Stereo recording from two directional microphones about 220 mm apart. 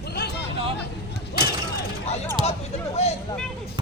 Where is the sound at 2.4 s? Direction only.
30° left (ahead or behind).